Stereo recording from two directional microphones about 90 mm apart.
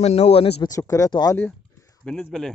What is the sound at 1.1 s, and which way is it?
Speech, 50° left (ahead or behind).